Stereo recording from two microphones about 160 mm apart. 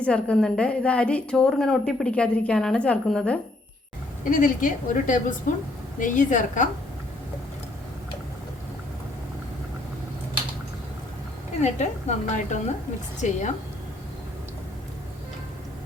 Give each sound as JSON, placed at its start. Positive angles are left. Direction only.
{"t": 0.0, "sound": "a woman's voice", "side_deg": 5}
{"t": 4.3, "sound": "a woman's voice", "side_deg": 55}
{"t": 11.6, "sound": "a woman's voice", "side_deg": 45}